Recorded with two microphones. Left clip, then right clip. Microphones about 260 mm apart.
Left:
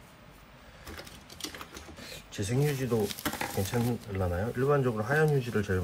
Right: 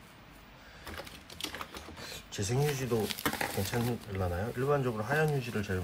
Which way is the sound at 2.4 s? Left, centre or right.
Centre.